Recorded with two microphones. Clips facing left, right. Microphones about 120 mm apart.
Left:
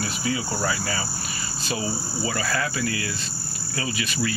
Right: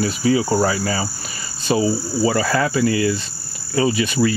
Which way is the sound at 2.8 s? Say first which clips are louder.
Right 10 dB; 30° right (ahead or behind).